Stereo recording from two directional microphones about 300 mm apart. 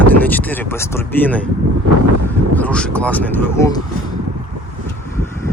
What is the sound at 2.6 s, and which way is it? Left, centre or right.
Speech, centre.